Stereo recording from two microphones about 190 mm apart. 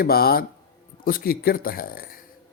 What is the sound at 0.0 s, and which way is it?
Speech, 55° left (ahead or behind).